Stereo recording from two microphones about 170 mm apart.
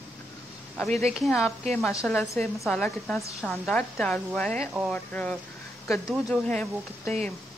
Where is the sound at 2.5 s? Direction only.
10° left (ahead or behind).